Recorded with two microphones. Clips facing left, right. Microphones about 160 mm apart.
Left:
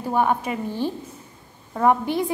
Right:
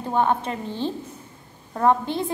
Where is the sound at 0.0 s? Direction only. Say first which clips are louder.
Even; 10° left (ahead or behind).